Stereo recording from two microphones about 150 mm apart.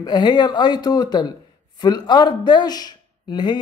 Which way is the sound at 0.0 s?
30° left (ahead or behind).